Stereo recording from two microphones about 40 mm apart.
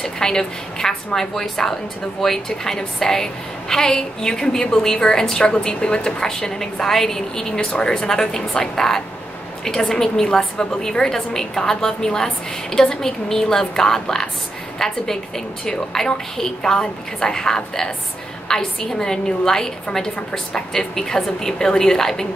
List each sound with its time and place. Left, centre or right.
0.0 s a woman's voice: centre
6.1 s a woman's voice: centre